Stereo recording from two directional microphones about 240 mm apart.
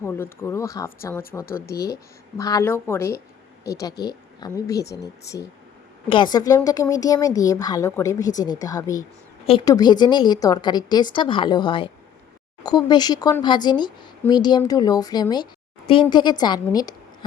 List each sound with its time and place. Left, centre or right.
0.0 s speech: centre
1.5 s speech: left
2.4 s speech: centre
6.3 s a woman's voice: centre